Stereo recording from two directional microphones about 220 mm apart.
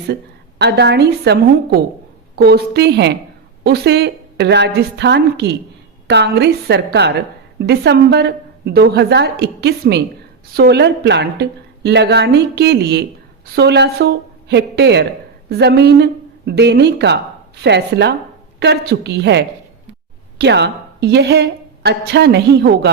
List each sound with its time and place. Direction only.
0.6 s a woman's voice: 50° right (ahead or behind)